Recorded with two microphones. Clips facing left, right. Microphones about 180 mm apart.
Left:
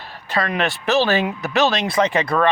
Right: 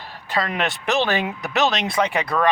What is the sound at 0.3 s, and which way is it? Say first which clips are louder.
A man's voice: left 2 dB; 20° right (ahead or behind).